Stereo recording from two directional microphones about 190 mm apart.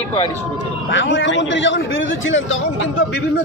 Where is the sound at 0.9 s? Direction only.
75° left (ahead or behind); by 2.6 s 90° left.